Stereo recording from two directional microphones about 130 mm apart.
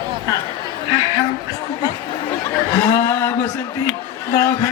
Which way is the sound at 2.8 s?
20° left (ahead or behind).